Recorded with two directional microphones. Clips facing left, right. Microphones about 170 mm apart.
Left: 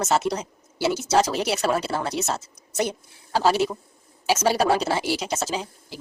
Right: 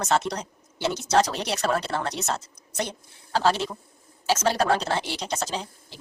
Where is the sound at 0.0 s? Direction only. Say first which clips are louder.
Left 2 dB; 5° left (ahead or behind).